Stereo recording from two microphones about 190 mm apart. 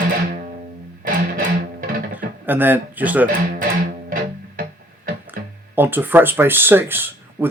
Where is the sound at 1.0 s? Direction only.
45° right (ahead or behind).